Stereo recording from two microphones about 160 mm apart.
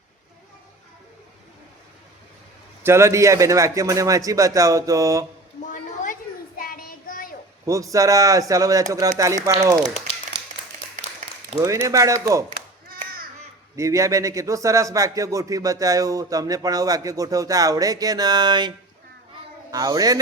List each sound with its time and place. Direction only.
2.8 s speech: 15° right (ahead or behind)
5.7 s a sound: 55° left (ahead or behind)
6.6 s child singing: 65° left (ahead or behind)
7.6 s speech: 20° right (ahead or behind)
11.6 s speech: 20° right (ahead or behind)
13.7 s speech: 20° right (ahead or behind)
19.7 s speech: 25° right (ahead or behind)